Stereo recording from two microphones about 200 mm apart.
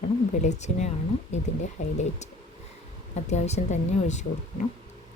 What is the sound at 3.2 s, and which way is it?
Speech, 35° left (ahead or behind).